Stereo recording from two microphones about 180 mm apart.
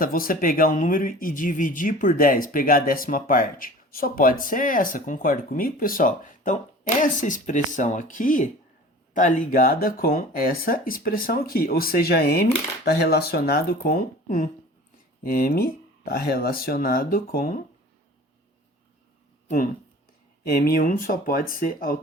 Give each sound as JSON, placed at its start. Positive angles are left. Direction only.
{"t": 0.0, "sound": "speech", "side_deg": 50}
{"t": 20.4, "sound": "speech", "side_deg": 60}